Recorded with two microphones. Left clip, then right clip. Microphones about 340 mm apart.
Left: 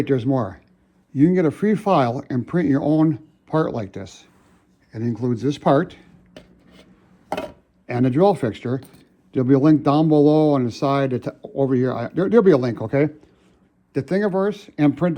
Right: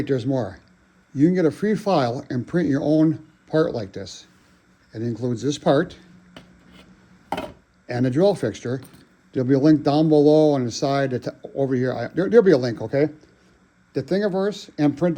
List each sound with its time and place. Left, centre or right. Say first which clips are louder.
0.0 s speech: left 2 dB; centre
6.3 s a sound: left 1 dB; centre
7.9 s speech: left 2 dB; centre
13.9 s speech: left 1 dB; left